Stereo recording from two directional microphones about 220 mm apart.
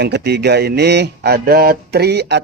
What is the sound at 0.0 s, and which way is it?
A man's voice, 50° right (ahead or behind).